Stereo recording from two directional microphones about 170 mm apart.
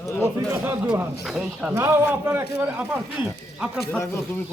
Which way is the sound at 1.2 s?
Centre (ahead or behind).